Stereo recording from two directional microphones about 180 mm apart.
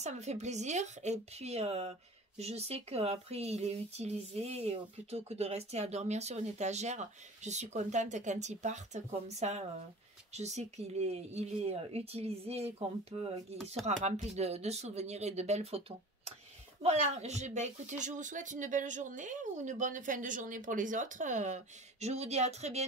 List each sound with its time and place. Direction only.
0.0 s speech: 40° right (ahead or behind)
16.8 s speech: 40° right (ahead or behind)